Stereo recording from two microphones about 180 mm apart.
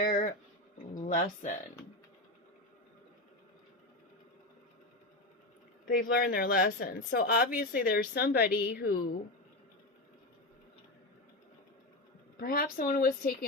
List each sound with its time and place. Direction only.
0.0 s a sound: 55° left (ahead or behind)
0.9 s speech: 45° left (ahead or behind)
5.9 s a woman's voice: 50° left (ahead or behind)
12.4 s speech: 55° left (ahead or behind)